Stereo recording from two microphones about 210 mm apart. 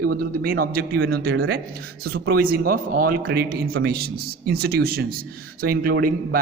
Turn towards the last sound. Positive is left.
turn(degrees=-45)  # may be behind; listen again after turning